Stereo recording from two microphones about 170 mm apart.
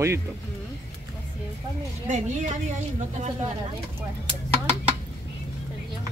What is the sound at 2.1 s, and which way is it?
Speech, 45° right (ahead or behind).